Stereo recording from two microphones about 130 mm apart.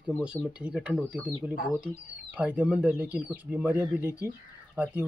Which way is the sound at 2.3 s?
10° right (ahead or behind).